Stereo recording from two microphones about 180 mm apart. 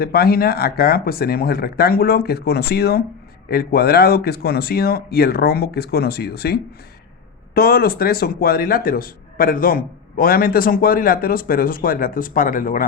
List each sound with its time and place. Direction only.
0.0 s a man's voice: 55° left (ahead or behind)